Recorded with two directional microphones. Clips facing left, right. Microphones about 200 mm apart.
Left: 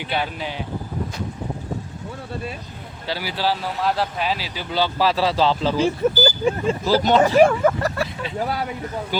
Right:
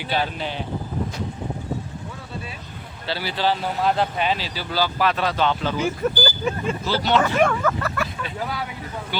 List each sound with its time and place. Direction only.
0.0 s speech: 10° left (ahead or behind)
3.1 s speech: 10° left (ahead or behind)
4.7 s speech: 25° left (ahead or behind)